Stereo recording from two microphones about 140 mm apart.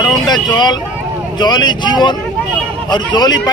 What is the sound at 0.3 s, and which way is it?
Speech, 30° left (ahead or behind).